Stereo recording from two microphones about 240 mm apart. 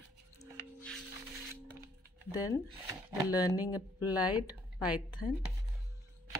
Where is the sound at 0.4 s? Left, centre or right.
Centre.